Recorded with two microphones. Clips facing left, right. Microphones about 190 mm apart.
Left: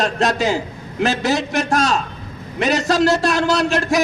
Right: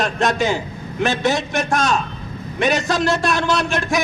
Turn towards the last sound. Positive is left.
turn(degrees=35)  # may be behind; listen again after turning